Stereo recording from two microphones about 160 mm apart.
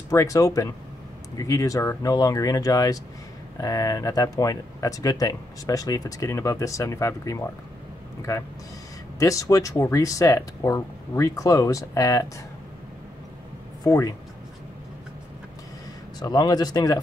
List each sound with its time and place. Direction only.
0.1 s speech: 20° left (ahead or behind)
9.2 s speech: 20° left (ahead or behind)
13.8 s speech: 20° left (ahead or behind)
16.2 s speech: 25° left (ahead or behind)